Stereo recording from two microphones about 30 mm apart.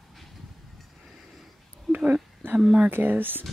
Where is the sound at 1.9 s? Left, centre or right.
Centre.